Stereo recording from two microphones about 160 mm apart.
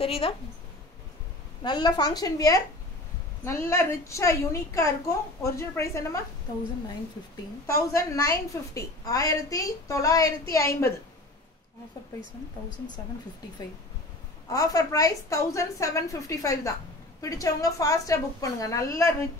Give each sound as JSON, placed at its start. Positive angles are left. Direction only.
{"t": 0.0, "sound": "a woman's voice", "side_deg": 35}
{"t": 1.6, "sound": "a woman's voice", "side_deg": 25}
{"t": 7.6, "sound": "a woman's voice", "side_deg": 20}
{"t": 14.5, "sound": "a woman's voice", "side_deg": 20}